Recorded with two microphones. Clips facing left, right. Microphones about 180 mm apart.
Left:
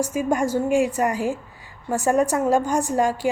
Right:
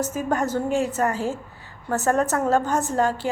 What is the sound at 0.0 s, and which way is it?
A woman's voice, 10° left (ahead or behind).